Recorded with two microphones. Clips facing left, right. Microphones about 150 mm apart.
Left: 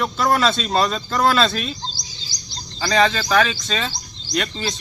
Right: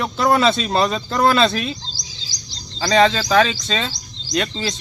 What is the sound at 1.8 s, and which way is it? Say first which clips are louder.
Bird: left 5 dB; 90° right.